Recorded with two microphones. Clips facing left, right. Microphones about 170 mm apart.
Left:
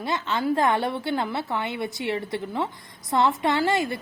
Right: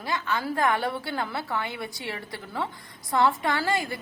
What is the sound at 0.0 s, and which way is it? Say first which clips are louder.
A woman's voice: left 3 dB; 25° left (ahead or behind).